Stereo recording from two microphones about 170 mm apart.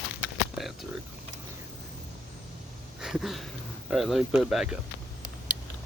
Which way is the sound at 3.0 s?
Centre (ahead or behind).